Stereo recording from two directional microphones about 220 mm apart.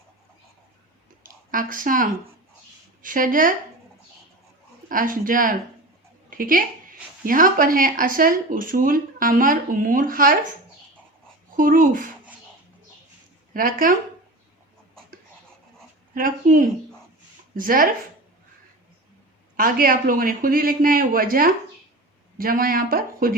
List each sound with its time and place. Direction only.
1.2 s speech: 40° right (ahead or behind)
4.9 s speech: 40° right (ahead or behind)
11.5 s speech: 40° right (ahead or behind)
13.5 s speech: 40° right (ahead or behind)
16.1 s speech: 40° right (ahead or behind)
19.5 s speech: 40° right (ahead or behind)